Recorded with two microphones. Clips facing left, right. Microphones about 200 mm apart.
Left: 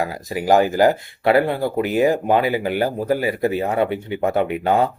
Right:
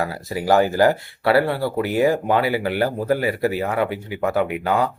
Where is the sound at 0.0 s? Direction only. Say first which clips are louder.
Left 1 dB; 15° left (ahead or behind).